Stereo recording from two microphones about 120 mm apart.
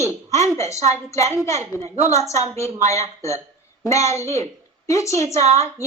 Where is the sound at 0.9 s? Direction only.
25° left (ahead or behind).